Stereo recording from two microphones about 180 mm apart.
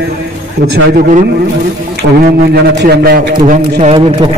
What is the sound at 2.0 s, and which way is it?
A man's voice, 65° right (ahead or behind).